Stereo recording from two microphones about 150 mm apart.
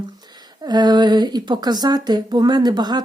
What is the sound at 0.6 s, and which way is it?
Speech, 30° right (ahead or behind).